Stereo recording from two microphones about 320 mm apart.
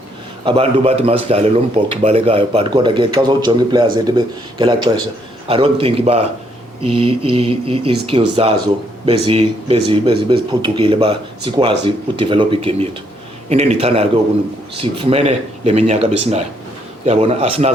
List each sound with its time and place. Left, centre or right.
0.4 s speech: centre